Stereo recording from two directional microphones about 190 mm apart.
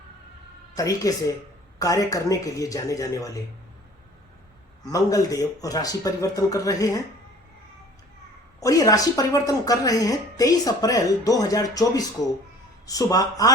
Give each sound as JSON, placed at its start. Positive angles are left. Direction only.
{"t": 0.8, "sound": "a woman's voice", "side_deg": 20}
{"t": 4.9, "sound": "speech", "side_deg": 20}
{"t": 8.6, "sound": "a woman's voice", "side_deg": 20}